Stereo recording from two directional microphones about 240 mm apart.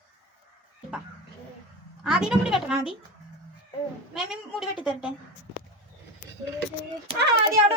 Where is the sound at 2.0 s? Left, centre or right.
Centre.